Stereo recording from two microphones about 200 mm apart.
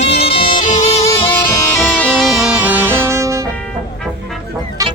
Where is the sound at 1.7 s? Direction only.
5° left (ahead or behind); by 3.4 s 15° right (ahead or behind).